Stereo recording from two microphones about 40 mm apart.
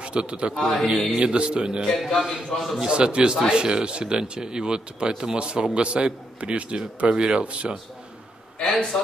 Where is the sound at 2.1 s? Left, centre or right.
Centre.